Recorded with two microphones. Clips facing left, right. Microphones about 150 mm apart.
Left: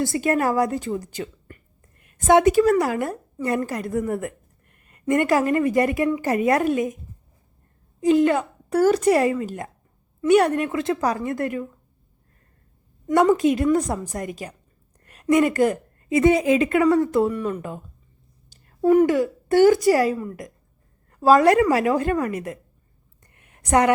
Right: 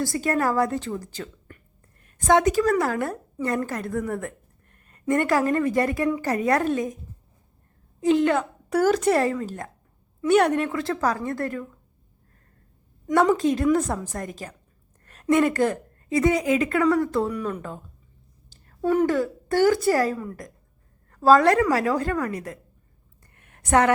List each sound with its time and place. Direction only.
0.0 s a woman's voice: 20° left (ahead or behind)
8.0 s a woman's voice: 5° left (ahead or behind)
10.6 s a woman's voice: 20° left (ahead or behind)
13.4 s a woman's voice: 10° left (ahead or behind)
15.0 s a sound: 10° left (ahead or behind)
15.5 s a woman's voice: 15° left (ahead or behind)
17.2 s a woman's voice: 5° left (ahead or behind)
18.8 s a woman's voice: 10° left (ahead or behind)
20.1 s a woman's voice: 5° left (ahead or behind)
21.1 s a woman's voice: 15° left (ahead or behind)
23.6 s a woman's voice: 10° left (ahead or behind)